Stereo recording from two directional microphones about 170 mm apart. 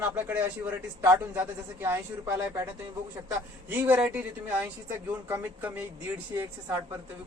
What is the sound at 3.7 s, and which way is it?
Speech, 10° right (ahead or behind).